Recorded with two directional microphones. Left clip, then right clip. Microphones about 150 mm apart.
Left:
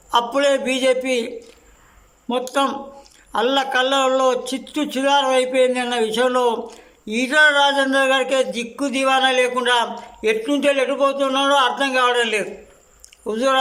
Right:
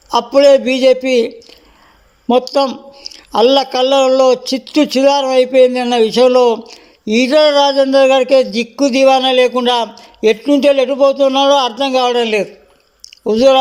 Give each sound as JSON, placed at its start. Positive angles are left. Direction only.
{"t": 0.1, "sound": "a man's voice", "side_deg": -25}
{"t": 2.6, "sound": "a man's voice", "side_deg": -25}